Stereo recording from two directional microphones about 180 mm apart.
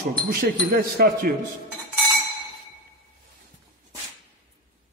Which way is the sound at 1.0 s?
55° right (ahead or behind).